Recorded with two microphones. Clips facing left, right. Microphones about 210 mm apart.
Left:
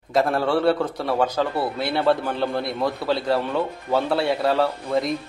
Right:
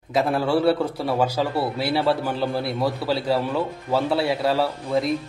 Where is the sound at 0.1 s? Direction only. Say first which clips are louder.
Even; 5° right (ahead or behind).